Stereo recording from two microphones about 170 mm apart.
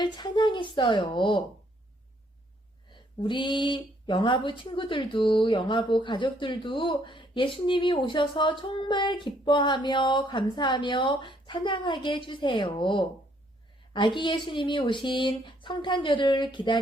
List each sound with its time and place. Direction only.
0.0 s speech: 25° left (ahead or behind)
2.9 s speech: 30° left (ahead or behind)